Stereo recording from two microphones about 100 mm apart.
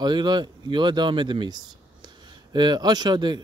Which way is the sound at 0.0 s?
50° right (ahead or behind).